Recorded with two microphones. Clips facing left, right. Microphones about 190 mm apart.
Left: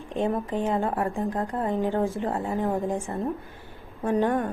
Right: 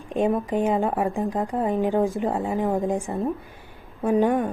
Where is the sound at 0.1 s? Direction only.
15° right (ahead or behind).